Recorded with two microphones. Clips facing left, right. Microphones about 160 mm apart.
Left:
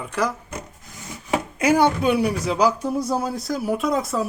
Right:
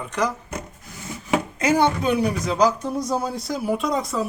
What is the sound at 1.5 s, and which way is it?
Speech, 10° left (ahead or behind).